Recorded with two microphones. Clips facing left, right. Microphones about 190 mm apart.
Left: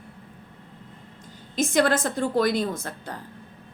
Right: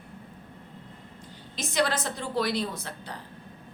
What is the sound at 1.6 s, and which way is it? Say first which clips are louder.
A woman's voice: left 6 dB; 50° left (ahead or behind).